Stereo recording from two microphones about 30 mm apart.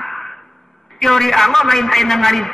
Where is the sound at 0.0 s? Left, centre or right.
Centre.